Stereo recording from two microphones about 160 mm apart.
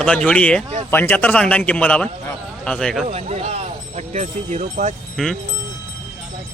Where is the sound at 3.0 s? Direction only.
45° right (ahead or behind).